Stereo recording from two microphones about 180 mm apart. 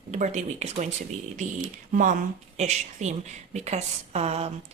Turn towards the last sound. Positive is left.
turn(degrees=-35)  # may be behind; listen again after turning